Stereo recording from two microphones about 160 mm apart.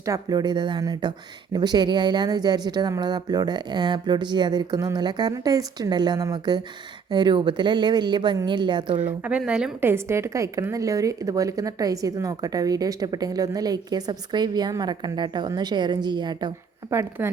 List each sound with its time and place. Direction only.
0.0 s a woman's voice: 20° right (ahead or behind)
9.2 s a woman's voice: 5° right (ahead or behind); by 16.5 s 25° right (ahead or behind)
16.9 s speech: 15° right (ahead or behind)